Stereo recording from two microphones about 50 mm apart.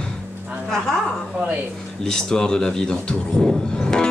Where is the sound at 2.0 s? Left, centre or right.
Centre.